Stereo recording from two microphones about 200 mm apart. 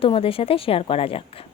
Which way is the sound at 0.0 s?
30° left (ahead or behind).